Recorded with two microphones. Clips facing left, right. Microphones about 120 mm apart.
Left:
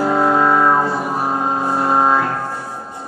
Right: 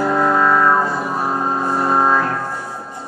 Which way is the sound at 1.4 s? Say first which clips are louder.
Left 1 dB; 10° left (ahead or behind).